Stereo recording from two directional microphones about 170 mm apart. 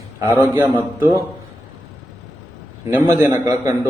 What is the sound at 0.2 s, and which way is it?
A man's voice, 15° right (ahead or behind).